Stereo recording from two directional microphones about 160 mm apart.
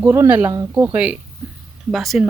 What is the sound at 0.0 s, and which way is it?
Speech, 15° right (ahead or behind).